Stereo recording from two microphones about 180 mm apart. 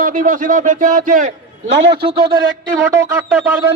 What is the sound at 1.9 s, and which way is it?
Speech, 60° right (ahead or behind).